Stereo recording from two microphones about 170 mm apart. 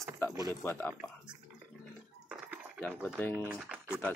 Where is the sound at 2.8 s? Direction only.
10° left (ahead or behind).